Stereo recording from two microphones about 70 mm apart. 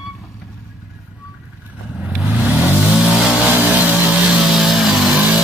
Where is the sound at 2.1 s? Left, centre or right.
Centre.